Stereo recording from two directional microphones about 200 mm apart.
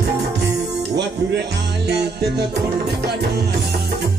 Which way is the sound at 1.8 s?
55° right (ahead or behind).